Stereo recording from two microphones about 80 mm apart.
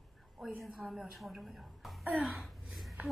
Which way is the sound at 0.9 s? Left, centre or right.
Centre.